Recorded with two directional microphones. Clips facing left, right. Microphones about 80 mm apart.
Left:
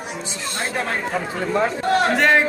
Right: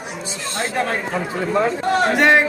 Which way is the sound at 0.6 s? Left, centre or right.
Centre.